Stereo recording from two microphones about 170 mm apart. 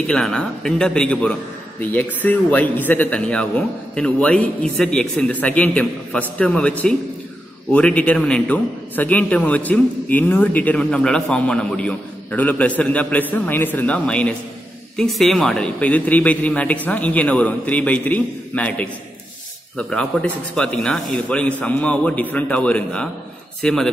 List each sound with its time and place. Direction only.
0.1 s a man's voice: 5° left (ahead or behind)